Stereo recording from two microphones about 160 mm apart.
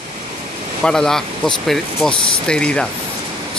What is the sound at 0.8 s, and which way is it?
Speech, 5° left (ahead or behind).